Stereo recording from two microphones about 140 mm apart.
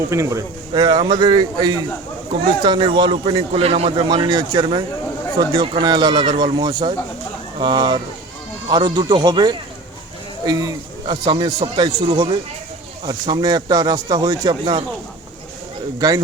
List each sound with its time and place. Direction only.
0.1 s speech: 20° right (ahead or behind)
0.7 s speech: 30° right (ahead or behind)
4.1 s speech: 30° right (ahead or behind)
16.0 s speech: 25° right (ahead or behind)